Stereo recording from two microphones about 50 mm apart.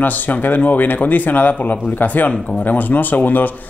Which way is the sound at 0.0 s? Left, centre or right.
Left.